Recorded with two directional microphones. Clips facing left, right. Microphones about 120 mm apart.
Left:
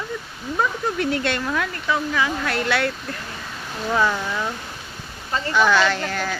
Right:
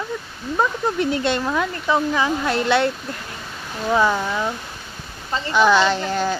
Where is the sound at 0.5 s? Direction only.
20° right (ahead or behind).